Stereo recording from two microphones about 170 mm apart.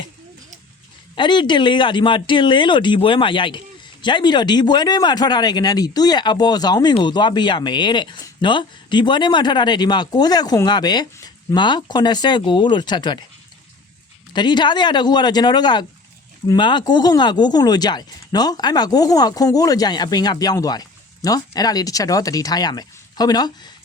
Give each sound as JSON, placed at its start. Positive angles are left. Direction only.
{"t": 1.1, "sound": "speech", "side_deg": 30}
{"t": 14.3, "sound": "speech", "side_deg": 25}